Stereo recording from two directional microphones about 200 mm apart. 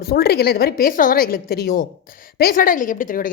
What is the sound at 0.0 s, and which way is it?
A woman's voice, 50° left (ahead or behind).